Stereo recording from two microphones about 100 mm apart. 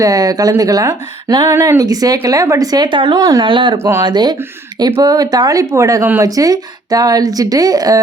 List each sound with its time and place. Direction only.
0.0 s speech: 40° right (ahead or behind); by 3.2 s 55° right (ahead or behind)
3.2 s speech: 35° right (ahead or behind)
3.4 s speech: 55° right (ahead or behind)
3.8 s speech: 25° right (ahead or behind)
4.0 s speech: 45° right (ahead or behind)